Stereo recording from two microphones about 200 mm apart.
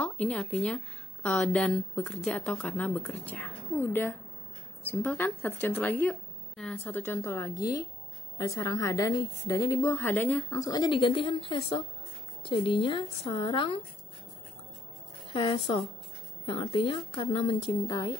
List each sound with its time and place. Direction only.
0.0 s a woman's voice: 5° left (ahead or behind); by 13.7 s 25° left (ahead or behind)
15.3 s a woman's voice: 25° left (ahead or behind)